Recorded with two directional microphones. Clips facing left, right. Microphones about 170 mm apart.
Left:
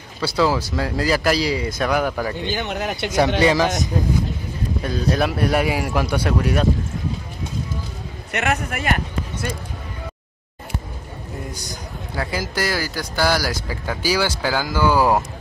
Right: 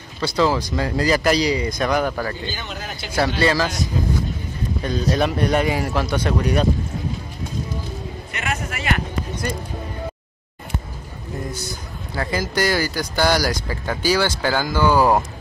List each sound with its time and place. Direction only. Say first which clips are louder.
0.2 s speech: even; 5° left (ahead or behind)
2.4 s speech: left 6 dB; 65° left (ahead or behind)
3.3 s speech: left 2 dB; 20° left (ahead or behind)
5.1 s speech: even; 5° left (ahead or behind)
8.3 s a man's voice: left 6 dB; 65° left (ahead or behind)
12.2 s speech: right 2 dB; 10° left (ahead or behind)